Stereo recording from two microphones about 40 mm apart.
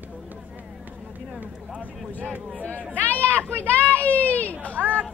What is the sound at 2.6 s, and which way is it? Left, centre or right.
Speech, left.